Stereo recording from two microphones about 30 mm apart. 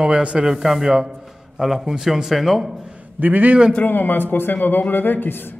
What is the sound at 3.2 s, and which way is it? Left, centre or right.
Speech, right.